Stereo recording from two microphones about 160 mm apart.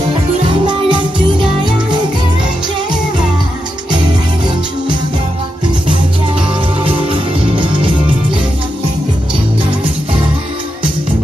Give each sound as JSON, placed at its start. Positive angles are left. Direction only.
{"t": 0.5, "sound": "music", "side_deg": -30}
{"t": 6.8, "sound": "music", "side_deg": -35}